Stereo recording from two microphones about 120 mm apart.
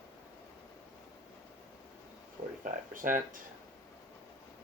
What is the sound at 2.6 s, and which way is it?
Speech, 90° right.